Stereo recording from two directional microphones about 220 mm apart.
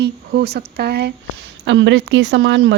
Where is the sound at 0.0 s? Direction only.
45° right (ahead or behind).